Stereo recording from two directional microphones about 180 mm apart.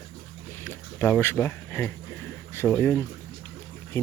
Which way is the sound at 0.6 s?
10° left (ahead or behind).